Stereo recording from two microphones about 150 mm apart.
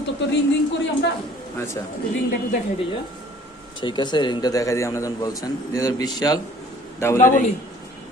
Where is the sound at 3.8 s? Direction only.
30° left (ahead or behind).